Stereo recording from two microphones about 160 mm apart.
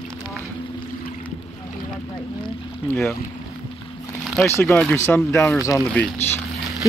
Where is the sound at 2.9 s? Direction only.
15° left (ahead or behind).